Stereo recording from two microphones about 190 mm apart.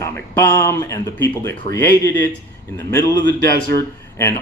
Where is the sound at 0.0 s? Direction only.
15° left (ahead or behind).